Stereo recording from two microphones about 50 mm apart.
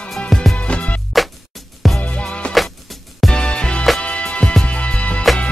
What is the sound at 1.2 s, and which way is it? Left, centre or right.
Music, centre.